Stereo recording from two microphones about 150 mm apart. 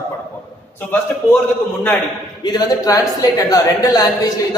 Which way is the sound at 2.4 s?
25° left (ahead or behind).